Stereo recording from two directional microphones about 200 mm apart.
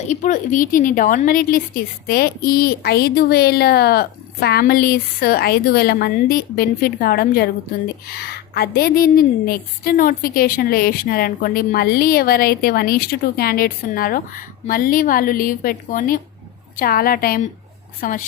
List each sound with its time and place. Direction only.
0.1 s a woman's voice: 40° left (ahead or behind)